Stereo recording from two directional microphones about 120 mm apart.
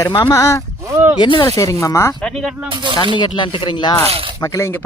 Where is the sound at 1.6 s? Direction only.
25° left (ahead or behind).